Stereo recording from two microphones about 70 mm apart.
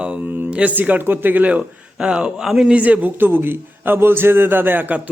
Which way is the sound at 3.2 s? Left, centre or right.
Right.